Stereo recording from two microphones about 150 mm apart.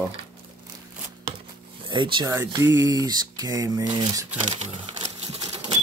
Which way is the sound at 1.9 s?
35° right (ahead or behind).